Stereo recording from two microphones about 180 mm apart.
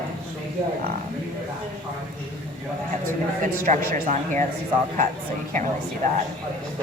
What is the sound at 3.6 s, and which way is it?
Speech, 45° right (ahead or behind).